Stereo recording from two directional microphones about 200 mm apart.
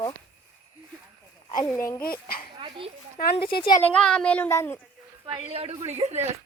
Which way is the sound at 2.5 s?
25° right (ahead or behind).